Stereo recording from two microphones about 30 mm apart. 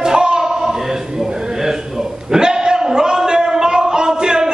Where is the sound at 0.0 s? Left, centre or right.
Right.